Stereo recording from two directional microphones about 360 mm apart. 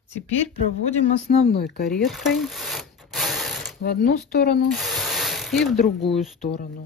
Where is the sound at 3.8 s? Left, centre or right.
Left.